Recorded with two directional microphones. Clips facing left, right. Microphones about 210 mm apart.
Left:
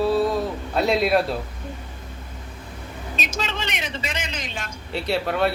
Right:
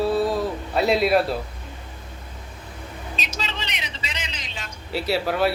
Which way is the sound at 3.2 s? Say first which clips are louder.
Left 5 dB; 50° left (ahead or behind).